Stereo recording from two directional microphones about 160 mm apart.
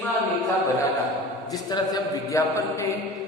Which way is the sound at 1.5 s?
25° left (ahead or behind).